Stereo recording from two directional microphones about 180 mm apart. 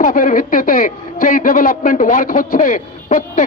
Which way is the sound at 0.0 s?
50° left (ahead or behind).